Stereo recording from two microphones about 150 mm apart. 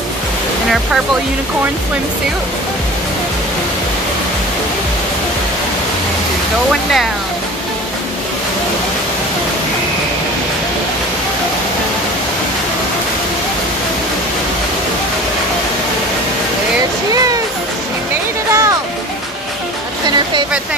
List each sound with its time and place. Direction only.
6.7 s speech: centre (ahead or behind)
17.1 s speech: 25° right (ahead or behind)
18.5 s music: 20° right (ahead or behind)